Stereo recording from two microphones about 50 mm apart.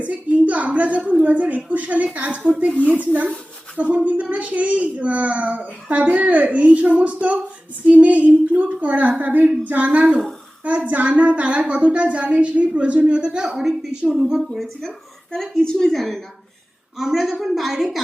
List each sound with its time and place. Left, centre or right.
0.0 s a sound: right
1.2 s a woman's voice: right; by 14.5 s centre
14.5 s a woman's voice: centre